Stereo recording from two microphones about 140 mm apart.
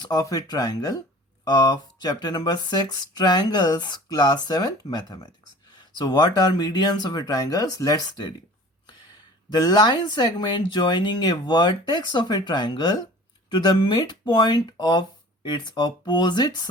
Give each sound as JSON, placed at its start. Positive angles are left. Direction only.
{"t": 0.0, "sound": "speech", "side_deg": 25}
{"t": 9.5, "sound": "speech", "side_deg": 30}